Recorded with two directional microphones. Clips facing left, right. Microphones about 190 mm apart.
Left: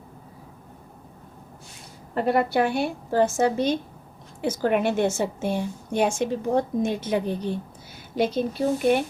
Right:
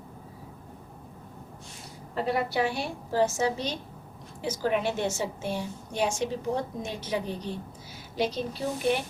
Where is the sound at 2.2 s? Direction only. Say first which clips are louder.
Left 6 dB; 55° left (ahead or behind).